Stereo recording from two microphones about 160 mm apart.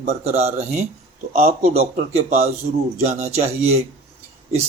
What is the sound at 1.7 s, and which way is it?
Speech, 40° right (ahead or behind).